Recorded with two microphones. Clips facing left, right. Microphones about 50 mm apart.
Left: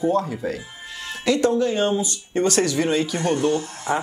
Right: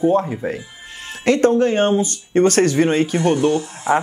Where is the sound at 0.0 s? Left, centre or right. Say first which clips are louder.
Right 4 dB; right.